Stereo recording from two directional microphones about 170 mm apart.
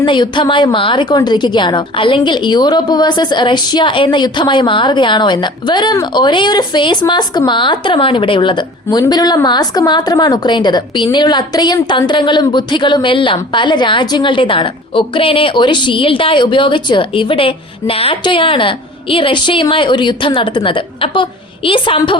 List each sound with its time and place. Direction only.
0.0 s a woman's voice: 30° left (ahead or behind)